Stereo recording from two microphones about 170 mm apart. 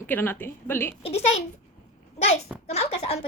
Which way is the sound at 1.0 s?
35° left (ahead or behind).